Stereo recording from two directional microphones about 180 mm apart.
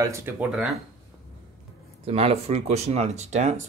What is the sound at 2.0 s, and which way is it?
Speech, 35° right (ahead or behind).